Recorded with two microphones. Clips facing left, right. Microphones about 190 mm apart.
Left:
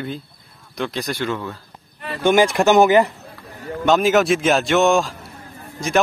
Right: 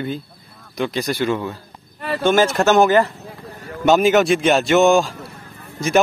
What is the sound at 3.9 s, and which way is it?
Speech, centre (ahead or behind).